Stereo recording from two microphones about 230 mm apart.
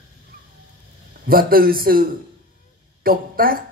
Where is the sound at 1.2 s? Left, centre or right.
Right.